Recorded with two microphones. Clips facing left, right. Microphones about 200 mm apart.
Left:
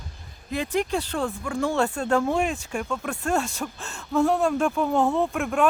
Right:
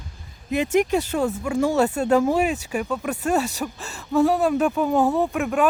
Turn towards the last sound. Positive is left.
turn(degrees=-5)  # may be behind; listen again after turning